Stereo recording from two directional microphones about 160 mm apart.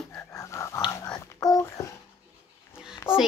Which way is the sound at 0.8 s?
20° left (ahead or behind).